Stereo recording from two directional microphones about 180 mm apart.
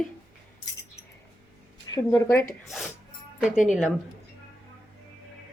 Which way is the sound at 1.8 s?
20° left (ahead or behind).